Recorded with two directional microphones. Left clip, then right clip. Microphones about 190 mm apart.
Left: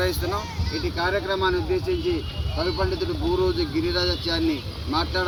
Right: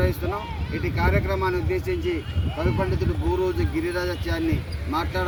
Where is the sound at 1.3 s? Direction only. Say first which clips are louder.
Left 2 dB; 25° right (ahead or behind).